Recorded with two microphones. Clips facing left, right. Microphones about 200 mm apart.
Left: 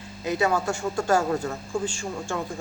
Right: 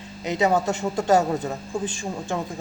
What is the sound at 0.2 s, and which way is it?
Speech, 20° right (ahead or behind).